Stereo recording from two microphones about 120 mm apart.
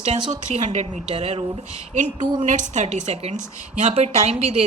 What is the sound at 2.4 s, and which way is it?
A woman's voice, 90° right.